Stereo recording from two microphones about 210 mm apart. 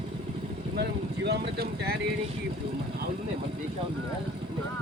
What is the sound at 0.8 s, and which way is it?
Speech, 50° right (ahead or behind).